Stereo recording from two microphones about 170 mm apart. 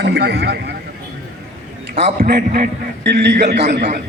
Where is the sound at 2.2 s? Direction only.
55° right (ahead or behind).